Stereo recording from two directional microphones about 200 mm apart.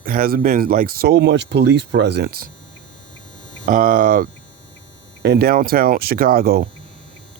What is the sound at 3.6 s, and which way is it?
Speech, 40° right (ahead or behind).